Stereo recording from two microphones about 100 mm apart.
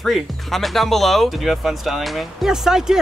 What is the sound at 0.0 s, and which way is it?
Speech, centre (ahead or behind).